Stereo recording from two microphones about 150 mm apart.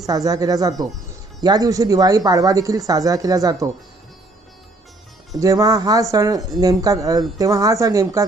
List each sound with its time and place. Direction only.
0.0 s speech: 25° right (ahead or behind)
5.4 s speech: 25° right (ahead or behind)